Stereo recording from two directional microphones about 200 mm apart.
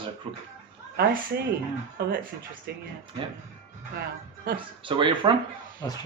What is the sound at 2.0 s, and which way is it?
Speech, 50° right (ahead or behind).